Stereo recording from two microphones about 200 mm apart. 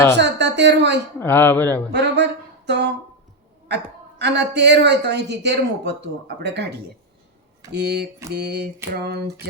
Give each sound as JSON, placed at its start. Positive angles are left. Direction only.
{"t": 0.2, "sound": "speech", "side_deg": -60}
{"t": 1.2, "sound": "speech", "side_deg": 10}
{"t": 1.9, "sound": "speech", "side_deg": -60}
{"t": 4.2, "sound": "speech", "side_deg": -60}